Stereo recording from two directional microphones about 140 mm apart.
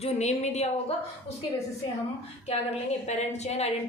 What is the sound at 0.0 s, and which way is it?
Speech, 55° left (ahead or behind).